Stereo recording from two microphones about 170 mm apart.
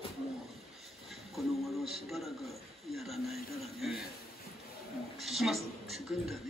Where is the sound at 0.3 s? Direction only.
Centre (ahead or behind).